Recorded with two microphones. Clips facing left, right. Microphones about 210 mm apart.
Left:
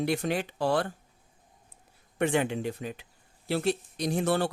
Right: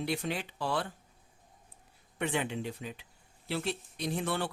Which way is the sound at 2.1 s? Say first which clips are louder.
Left 6 dB; 50° left (ahead or behind).